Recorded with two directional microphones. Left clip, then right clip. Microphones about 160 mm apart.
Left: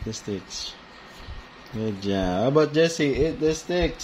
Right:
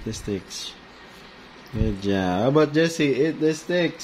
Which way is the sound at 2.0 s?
20° right (ahead or behind).